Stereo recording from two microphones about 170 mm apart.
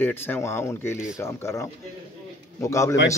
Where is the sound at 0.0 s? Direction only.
15° left (ahead or behind).